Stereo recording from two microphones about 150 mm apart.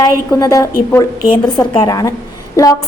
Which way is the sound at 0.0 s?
25° left (ahead or behind).